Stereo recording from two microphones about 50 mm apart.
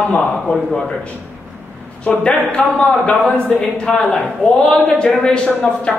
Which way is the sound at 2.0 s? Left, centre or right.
Left.